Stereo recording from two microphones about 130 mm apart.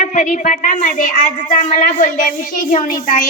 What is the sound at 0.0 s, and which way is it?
A woman's voice, 80° left.